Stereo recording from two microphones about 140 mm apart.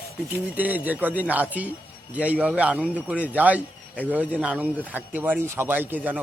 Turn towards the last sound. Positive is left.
turn(degrees=-10)  # may be behind; listen again after turning